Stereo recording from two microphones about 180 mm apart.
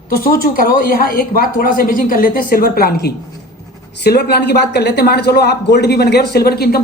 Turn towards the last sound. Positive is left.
turn(degrees=60)  # may be behind; listen again after turning